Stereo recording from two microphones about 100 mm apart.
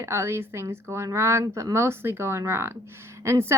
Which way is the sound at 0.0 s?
30° right (ahead or behind).